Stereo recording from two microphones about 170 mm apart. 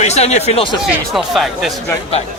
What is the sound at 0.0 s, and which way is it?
Speech, 40° left (ahead or behind).